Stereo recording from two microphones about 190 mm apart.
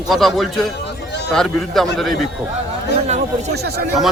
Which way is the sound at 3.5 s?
60° right (ahead or behind).